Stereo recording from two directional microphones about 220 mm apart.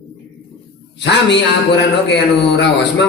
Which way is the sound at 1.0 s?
50° left (ahead or behind).